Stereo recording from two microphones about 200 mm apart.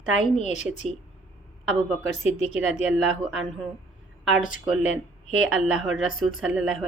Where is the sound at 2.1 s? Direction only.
35° left (ahead or behind).